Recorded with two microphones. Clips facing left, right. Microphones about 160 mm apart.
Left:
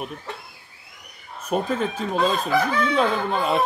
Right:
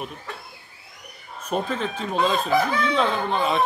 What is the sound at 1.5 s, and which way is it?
Speech, 5° left (ahead or behind).